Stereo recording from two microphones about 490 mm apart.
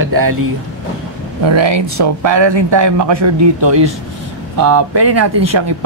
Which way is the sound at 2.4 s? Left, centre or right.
Right.